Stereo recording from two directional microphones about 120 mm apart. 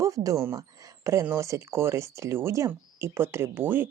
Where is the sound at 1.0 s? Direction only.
20° right (ahead or behind).